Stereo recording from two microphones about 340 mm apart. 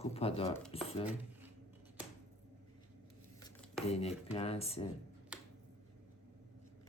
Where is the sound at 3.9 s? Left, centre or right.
Centre.